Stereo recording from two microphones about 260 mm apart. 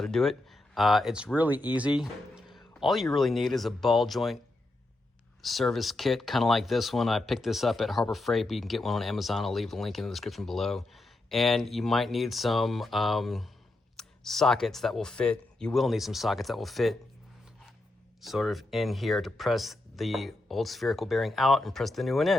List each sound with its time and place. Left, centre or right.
0.0 s speech: centre
5.4 s speech: centre
18.2 s speech: centre